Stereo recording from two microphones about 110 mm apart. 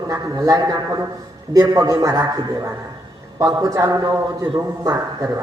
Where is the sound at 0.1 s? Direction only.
30° right (ahead or behind).